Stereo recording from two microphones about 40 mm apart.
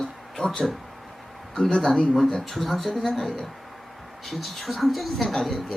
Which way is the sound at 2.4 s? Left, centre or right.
Centre.